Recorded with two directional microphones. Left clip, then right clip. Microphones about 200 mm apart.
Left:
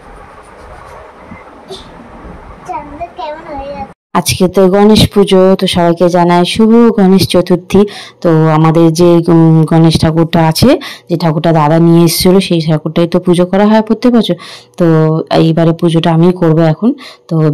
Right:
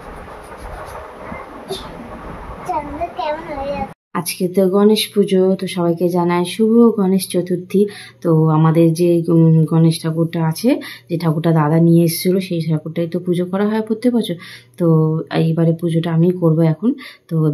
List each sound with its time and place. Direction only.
4.1 s speech: 40° left (ahead or behind); by 17.5 s 25° left (ahead or behind)